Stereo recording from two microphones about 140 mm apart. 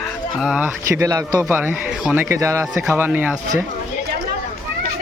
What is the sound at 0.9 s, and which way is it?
Speech, 25° right (ahead or behind).